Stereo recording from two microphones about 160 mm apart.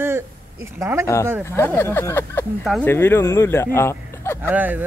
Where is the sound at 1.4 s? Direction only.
15° left (ahead or behind).